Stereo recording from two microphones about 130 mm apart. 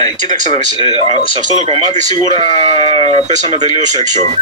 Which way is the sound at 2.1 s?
40° left (ahead or behind).